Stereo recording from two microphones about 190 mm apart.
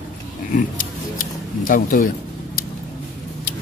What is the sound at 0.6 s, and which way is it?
Speech, 45° left (ahead or behind).